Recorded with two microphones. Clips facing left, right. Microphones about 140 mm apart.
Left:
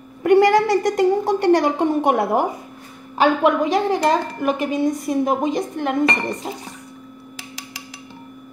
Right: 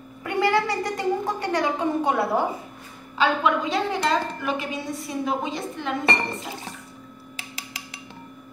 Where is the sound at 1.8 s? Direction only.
90° left.